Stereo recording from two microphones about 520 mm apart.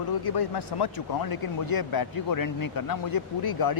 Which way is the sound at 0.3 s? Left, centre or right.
Left.